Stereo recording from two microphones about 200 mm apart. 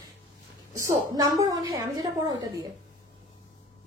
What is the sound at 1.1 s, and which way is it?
A woman's voice, 15° right (ahead or behind).